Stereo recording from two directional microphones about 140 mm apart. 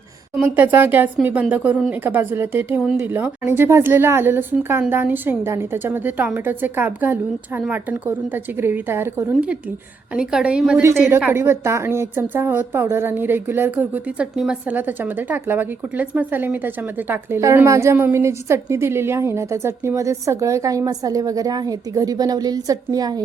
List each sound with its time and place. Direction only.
0.3 s a woman's voice: 10° right (ahead or behind)
2.8 s speech: 5° right (ahead or behind)
3.1 s a woman's voice: 15° right (ahead or behind)